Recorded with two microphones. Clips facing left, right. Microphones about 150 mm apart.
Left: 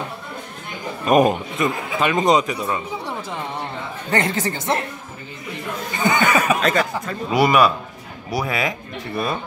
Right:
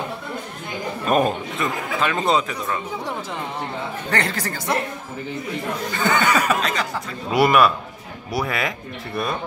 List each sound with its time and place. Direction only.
1.0 s a man's voice: 15° left (ahead or behind)
4.1 s a woman's voice: 20° left (ahead or behind)
5.9 s a man's voice: 15° left (ahead or behind)
6.6 s speech: 50° left (ahead or behind)
7.3 s speech: centre (ahead or behind)